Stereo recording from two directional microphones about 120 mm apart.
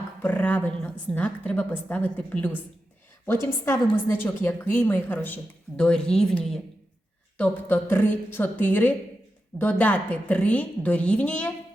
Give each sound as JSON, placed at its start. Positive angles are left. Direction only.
{"t": 0.2, "sound": "a woman's voice", "side_deg": 15}
{"t": 3.7, "sound": "a woman's voice", "side_deg": 20}